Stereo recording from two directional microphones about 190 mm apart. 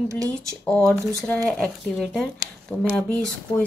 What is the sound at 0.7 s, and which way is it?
A woman's voice, 5° left (ahead or behind).